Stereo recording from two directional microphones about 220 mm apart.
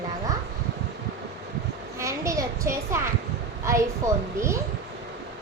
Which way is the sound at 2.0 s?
15° right (ahead or behind).